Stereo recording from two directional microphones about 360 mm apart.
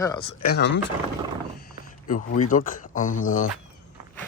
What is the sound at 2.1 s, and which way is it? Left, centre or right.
Speech, left.